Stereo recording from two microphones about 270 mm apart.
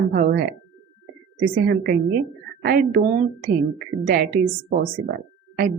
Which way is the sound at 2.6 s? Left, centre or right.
Right.